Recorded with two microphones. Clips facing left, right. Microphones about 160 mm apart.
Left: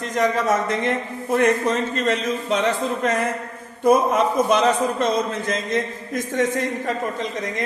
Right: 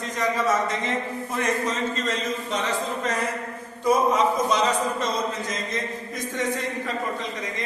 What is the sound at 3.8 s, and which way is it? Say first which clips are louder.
A man's voice: left 3 dB; 55° left (ahead or behind).